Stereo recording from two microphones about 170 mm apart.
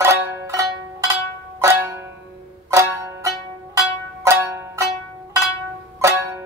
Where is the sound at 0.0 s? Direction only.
15° right (ahead or behind).